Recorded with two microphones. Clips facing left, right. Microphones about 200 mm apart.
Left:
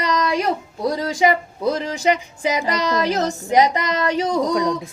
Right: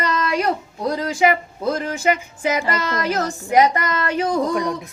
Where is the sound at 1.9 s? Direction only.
15° left (ahead or behind).